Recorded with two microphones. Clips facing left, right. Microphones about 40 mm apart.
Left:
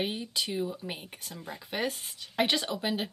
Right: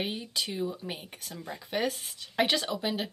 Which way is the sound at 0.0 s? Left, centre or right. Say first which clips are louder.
Left 1 dB; centre.